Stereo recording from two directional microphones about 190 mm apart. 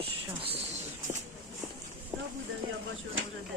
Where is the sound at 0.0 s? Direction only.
30° right (ahead or behind).